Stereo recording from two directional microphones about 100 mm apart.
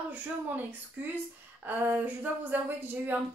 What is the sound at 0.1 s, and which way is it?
A woman's voice, 20° right (ahead or behind).